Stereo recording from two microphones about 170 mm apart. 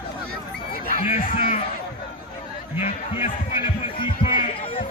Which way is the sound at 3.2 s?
30° left (ahead or behind).